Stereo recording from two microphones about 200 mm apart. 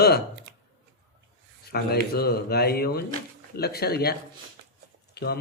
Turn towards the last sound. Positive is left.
turn(degrees=55)  # may be behind; listen again after turning